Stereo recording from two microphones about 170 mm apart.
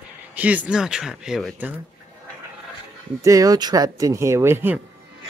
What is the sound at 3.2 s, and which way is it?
Speech, 20° right (ahead or behind).